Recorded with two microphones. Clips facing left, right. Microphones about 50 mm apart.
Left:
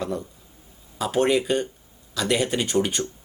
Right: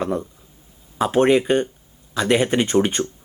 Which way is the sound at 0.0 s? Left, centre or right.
Right.